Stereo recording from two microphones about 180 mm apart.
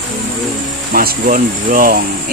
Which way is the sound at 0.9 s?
50° right (ahead or behind).